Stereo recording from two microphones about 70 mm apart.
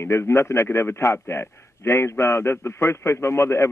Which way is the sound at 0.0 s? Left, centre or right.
Left.